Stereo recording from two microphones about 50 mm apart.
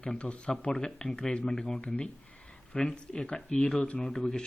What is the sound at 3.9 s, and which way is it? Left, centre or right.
Speech, centre.